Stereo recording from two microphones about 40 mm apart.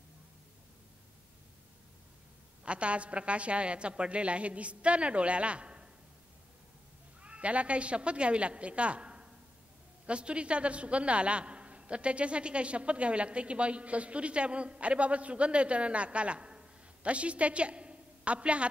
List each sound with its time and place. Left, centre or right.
2.6 s a woman's voice: right
7.2 s a man's voice: right